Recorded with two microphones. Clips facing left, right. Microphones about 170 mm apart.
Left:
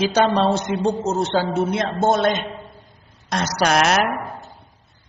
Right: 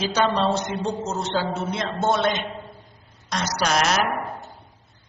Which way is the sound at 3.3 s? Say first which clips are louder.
Left 4 dB; 55° left (ahead or behind).